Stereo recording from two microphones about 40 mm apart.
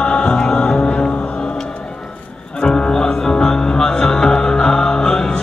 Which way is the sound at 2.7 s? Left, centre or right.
Left.